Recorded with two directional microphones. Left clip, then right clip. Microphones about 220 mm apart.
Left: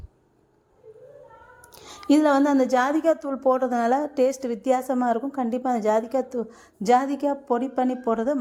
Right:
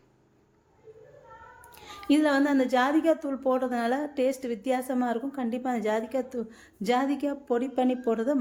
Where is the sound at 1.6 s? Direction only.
25° left (ahead or behind).